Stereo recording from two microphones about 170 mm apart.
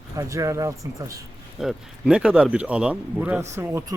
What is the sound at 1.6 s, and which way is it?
Speech, 5° right (ahead or behind).